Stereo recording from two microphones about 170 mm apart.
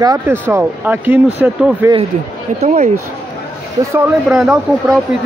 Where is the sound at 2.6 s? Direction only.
40° right (ahead or behind).